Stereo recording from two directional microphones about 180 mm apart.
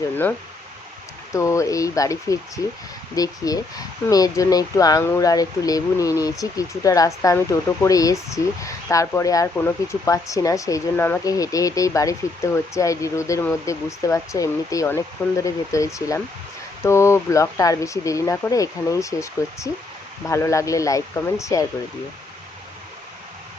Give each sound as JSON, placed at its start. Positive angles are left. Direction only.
{"t": 1.3, "sound": "speech", "side_deg": 15}